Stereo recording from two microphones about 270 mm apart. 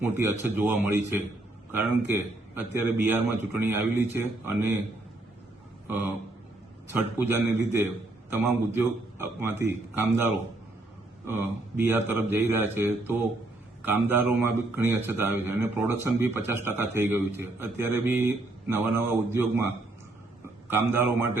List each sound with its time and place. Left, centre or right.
0.0 s a man's voice: centre
6.9 s a man's voice: centre